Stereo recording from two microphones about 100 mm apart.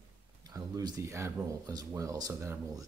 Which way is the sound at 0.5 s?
40° right (ahead or behind).